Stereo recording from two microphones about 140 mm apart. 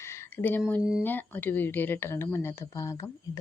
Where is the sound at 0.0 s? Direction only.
20° left (ahead or behind).